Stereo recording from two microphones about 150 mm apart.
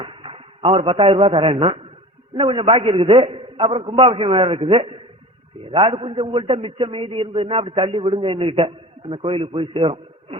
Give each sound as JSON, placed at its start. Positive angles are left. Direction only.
{"t": 0.0, "sound": "a man's voice", "side_deg": -35}